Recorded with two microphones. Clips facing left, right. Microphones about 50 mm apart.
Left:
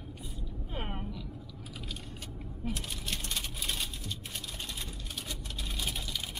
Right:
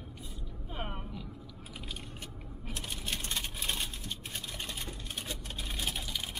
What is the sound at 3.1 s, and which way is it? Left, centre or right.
Vehicle, right.